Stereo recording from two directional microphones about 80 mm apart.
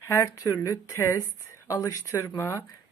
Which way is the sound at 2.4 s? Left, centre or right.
Left.